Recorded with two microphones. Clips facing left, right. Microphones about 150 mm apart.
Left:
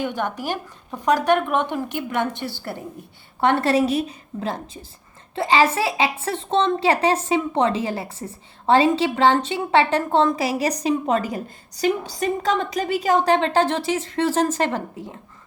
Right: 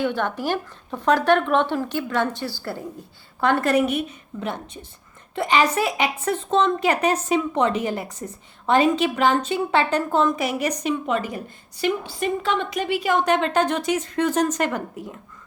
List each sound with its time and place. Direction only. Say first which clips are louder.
0.0 s a woman's voice: right 2 dB; 15° left (ahead or behind)